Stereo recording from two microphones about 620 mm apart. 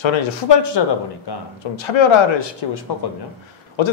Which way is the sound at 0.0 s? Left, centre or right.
Left.